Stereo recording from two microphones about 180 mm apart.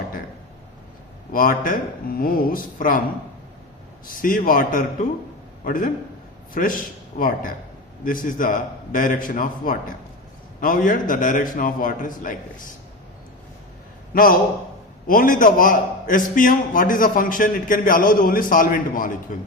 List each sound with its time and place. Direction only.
1.3 s a man's voice: 50° left (ahead or behind)
4.0 s a man's voice: 50° left (ahead or behind)
14.1 s a man's voice: 50° left (ahead or behind)